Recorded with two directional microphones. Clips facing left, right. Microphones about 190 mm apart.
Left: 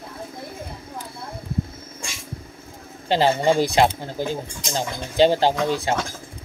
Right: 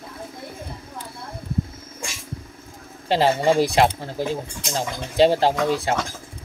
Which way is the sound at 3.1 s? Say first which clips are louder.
Even; centre (ahead or behind).